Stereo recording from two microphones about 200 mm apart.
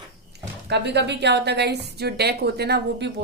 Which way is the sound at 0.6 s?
60° right (ahead or behind).